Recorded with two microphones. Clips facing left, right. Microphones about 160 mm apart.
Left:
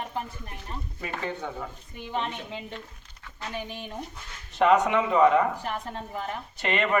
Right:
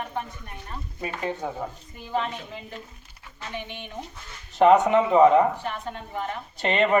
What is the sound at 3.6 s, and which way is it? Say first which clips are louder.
Speech: left 1 dB; 35° left (ahead or behind).